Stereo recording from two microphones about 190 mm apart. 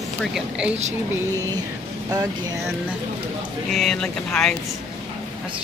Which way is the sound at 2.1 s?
20° right (ahead or behind).